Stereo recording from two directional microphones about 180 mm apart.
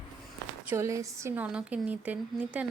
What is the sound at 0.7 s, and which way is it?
Speech, 15° right (ahead or behind).